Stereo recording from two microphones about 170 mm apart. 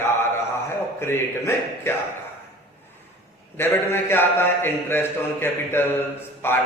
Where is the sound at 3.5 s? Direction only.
15° left (ahead or behind).